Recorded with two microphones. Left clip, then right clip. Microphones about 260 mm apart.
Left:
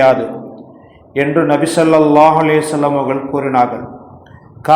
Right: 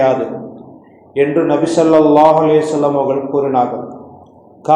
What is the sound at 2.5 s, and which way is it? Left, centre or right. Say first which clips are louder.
Speech: right 1 dB; left.